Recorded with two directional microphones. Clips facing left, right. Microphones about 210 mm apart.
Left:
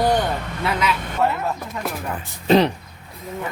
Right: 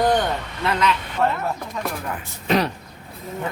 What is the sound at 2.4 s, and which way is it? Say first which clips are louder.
Speech: left 5 dB; 25° left (ahead or behind).